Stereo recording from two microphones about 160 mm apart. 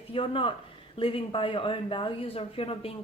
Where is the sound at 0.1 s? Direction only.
35° left (ahead or behind).